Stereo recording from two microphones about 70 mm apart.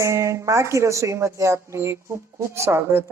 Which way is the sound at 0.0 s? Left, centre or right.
Right.